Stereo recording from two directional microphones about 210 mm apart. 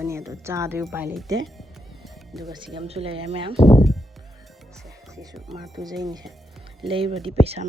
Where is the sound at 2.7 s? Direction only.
30° right (ahead or behind).